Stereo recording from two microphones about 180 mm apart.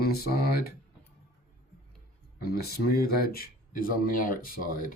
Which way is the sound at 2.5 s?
60° left (ahead or behind).